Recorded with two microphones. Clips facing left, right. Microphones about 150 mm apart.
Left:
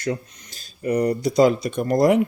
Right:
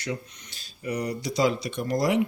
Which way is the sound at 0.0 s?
45° left (ahead or behind).